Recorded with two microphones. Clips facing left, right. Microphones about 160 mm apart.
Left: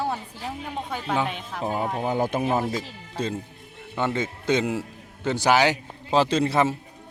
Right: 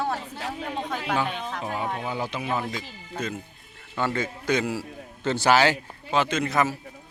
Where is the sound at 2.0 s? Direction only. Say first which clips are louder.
Left 6 dB; 45° left (ahead or behind).